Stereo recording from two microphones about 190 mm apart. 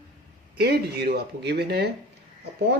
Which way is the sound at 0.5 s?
55° right (ahead or behind).